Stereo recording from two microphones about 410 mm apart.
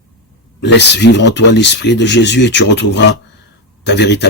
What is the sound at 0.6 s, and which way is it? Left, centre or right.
Speech, left.